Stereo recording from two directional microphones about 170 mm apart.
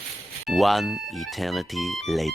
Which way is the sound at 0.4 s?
Centre (ahead or behind).